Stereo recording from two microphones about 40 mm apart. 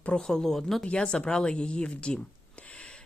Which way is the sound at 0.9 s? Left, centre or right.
Left.